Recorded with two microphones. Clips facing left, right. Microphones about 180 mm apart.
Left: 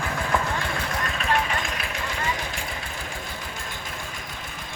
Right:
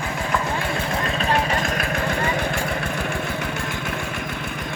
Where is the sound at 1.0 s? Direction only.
35° right (ahead or behind).